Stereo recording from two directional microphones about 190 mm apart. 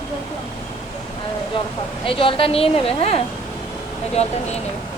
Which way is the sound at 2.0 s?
30° left (ahead or behind).